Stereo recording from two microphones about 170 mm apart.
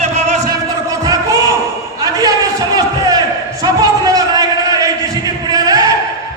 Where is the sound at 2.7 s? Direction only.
20° right (ahead or behind).